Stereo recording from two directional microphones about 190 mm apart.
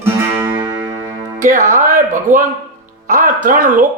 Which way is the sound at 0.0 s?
10° right (ahead or behind).